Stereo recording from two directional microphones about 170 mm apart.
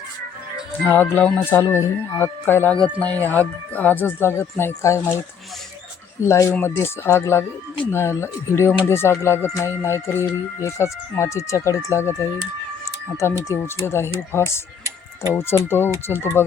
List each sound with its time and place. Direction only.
0.9 s speech: 10° left (ahead or behind)
6.2 s speech: 15° left (ahead or behind)
13.5 s speech: 15° left (ahead or behind)
14.8 s music: 15° right (ahead or behind)
15.4 s speech: 15° left (ahead or behind)